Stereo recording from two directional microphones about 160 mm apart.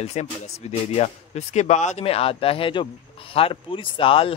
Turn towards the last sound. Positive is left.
turn(degrees=35)  # may be behind; listen again after turning